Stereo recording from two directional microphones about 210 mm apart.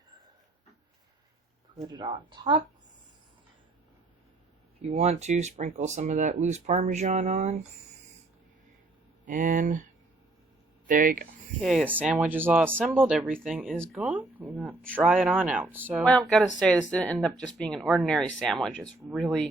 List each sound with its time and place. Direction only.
1.8 s a woman's voice: 20° right (ahead or behind)
4.8 s speech: 30° right (ahead or behind)
9.2 s speech: 40° right (ahead or behind)
10.8 s speech: 40° right (ahead or behind)
11.6 s speech: centre (ahead or behind)
14.0 s speech: 5° right (ahead or behind)
16.0 s speech: 5° left (ahead or behind)